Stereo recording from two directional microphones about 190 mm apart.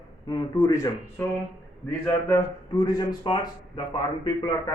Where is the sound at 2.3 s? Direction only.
20° left (ahead or behind).